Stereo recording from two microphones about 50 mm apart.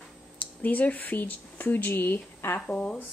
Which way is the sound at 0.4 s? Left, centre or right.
Left.